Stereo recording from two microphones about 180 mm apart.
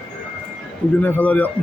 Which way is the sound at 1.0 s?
10° left (ahead or behind).